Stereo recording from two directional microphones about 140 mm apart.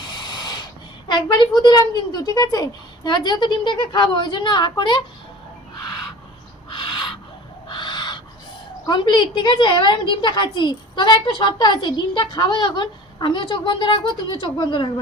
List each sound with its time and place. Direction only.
0.2 s a sound: 30° left (ahead or behind)
1.0 s a woman's voice: 30° left (ahead or behind)
5.7 s owl: 30° left (ahead or behind)
8.9 s a woman's voice: 35° left (ahead or behind)